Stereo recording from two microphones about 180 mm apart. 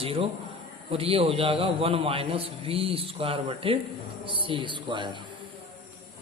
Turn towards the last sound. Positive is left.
turn(degrees=-25)  # may be behind; listen again after turning